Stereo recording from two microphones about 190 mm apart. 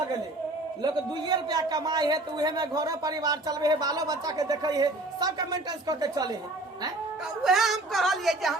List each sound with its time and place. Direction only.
1.3 s speech: 20° right (ahead or behind)
7.4 s a woman's voice: centre (ahead or behind)